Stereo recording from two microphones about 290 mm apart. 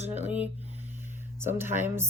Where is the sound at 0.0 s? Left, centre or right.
Right.